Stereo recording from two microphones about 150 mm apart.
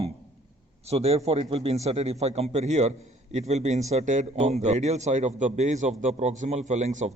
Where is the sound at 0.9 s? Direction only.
45° right (ahead or behind).